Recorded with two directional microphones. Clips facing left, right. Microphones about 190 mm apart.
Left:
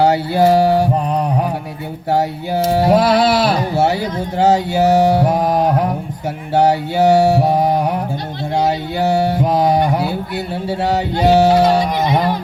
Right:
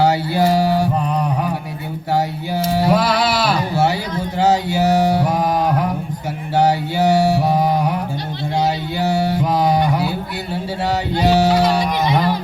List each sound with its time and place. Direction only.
0.0 s mantra: 55° left (ahead or behind)
0.9 s mantra: 30° left (ahead or behind)
2.1 s a sound: 55° left (ahead or behind)
4.4 s mantra: 55° left (ahead or behind)
12.0 s music: 50° left (ahead or behind)